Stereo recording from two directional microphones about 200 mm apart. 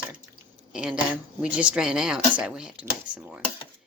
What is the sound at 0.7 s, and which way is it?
Speech, 5° right (ahead or behind).